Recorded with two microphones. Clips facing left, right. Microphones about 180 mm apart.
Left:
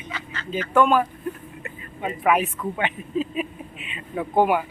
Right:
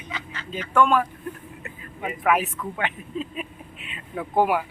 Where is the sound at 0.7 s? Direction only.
5° left (ahead or behind).